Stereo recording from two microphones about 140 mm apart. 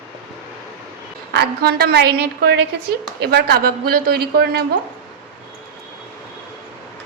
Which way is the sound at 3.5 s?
90° right.